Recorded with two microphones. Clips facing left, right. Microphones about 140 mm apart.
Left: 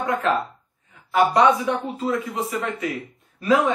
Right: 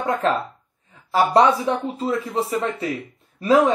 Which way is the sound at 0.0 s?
30° right (ahead or behind).